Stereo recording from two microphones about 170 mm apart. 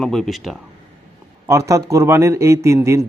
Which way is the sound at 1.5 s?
15° right (ahead or behind).